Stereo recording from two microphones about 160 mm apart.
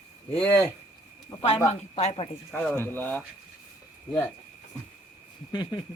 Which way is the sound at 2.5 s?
10° left (ahead or behind).